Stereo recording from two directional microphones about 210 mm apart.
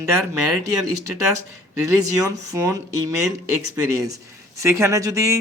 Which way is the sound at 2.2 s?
15° right (ahead or behind).